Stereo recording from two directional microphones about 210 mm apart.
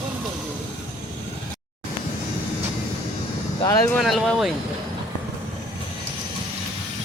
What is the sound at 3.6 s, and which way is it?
Speech, 15° left (ahead or behind).